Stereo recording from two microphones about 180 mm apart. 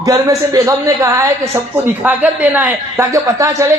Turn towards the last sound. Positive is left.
turn(degrees=-15)  # may be behind; listen again after turning